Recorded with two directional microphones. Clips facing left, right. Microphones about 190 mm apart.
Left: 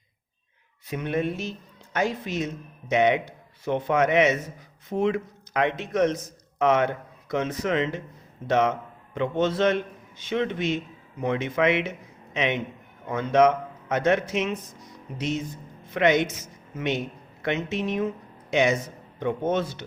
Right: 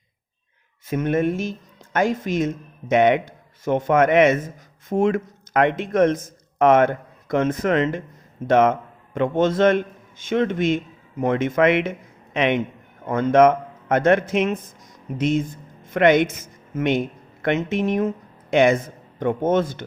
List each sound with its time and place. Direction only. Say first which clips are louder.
0.9 s a man's voice: right 6 dB; 45° right (ahead or behind)